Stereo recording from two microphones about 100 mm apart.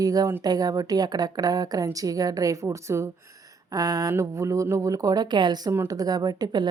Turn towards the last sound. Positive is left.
turn(degrees=-45)  # may be behind; listen again after turning